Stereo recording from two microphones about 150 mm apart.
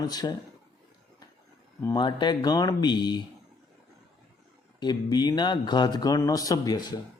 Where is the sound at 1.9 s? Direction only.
30° left (ahead or behind).